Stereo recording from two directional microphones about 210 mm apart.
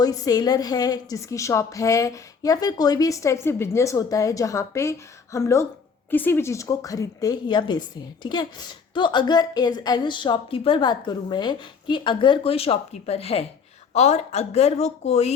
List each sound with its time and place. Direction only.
0.0 s a woman's voice: 20° left (ahead or behind)